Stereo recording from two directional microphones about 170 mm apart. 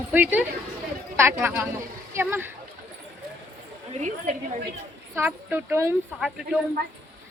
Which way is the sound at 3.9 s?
45° right (ahead or behind).